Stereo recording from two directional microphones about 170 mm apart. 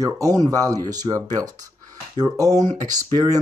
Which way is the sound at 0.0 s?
20° right (ahead or behind).